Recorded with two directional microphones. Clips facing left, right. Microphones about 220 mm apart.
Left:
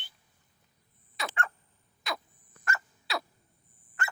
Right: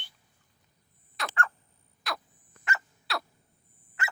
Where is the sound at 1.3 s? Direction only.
25° left (ahead or behind).